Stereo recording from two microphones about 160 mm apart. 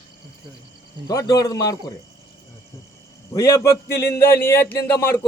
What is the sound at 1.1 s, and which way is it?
Speech, 20° left (ahead or behind).